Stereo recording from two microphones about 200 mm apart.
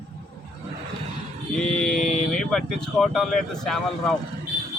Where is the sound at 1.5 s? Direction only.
5° left (ahead or behind).